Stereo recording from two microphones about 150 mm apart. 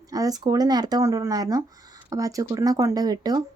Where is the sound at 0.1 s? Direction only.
25° right (ahead or behind).